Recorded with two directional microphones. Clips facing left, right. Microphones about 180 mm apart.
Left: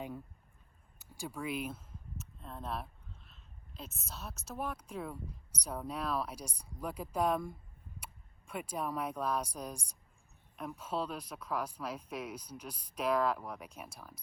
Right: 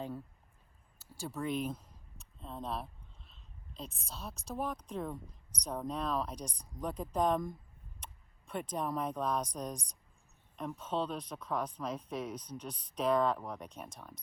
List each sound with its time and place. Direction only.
0.9 s speech: 15° left (ahead or behind)